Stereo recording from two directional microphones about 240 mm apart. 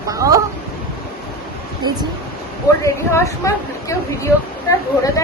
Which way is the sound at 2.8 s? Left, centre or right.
Centre.